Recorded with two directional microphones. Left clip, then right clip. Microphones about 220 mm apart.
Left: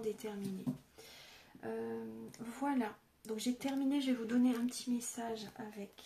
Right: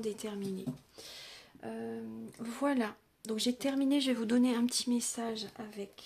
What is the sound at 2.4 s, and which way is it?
Speech, 45° right (ahead or behind).